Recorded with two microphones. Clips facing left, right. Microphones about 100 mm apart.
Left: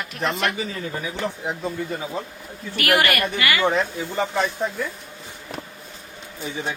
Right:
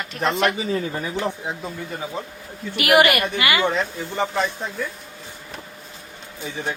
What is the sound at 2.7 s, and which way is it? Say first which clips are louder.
Speech: right 4 dB; 15° right (ahead or behind).